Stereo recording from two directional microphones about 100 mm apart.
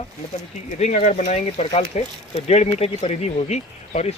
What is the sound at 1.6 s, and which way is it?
Speech, 90° left.